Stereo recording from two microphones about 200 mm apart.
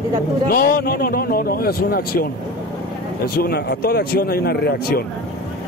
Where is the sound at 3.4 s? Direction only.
50° left (ahead or behind).